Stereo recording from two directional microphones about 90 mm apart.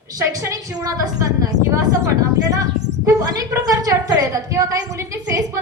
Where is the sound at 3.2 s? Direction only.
45° right (ahead or behind).